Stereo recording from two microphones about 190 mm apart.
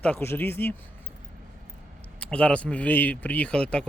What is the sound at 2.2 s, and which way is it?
Speech, 5° left (ahead or behind).